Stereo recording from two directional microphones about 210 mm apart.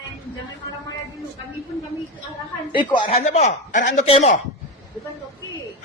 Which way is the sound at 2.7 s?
25° left (ahead or behind).